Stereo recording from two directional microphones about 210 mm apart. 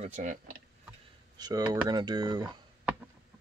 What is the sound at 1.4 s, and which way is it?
Speech, 20° right (ahead or behind).